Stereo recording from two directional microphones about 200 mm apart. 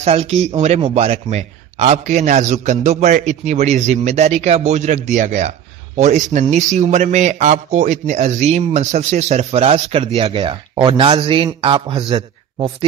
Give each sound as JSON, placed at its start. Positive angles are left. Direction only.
{"t": 0.0, "sound": "a man's voice", "side_deg": -30}